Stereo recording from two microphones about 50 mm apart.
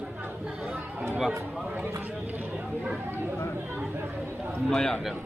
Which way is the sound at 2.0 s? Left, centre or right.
Right.